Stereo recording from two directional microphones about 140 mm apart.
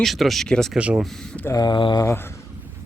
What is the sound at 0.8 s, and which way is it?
Speech, 10° right (ahead or behind).